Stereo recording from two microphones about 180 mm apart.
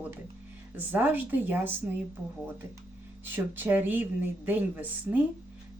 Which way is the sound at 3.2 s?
10° right (ahead or behind).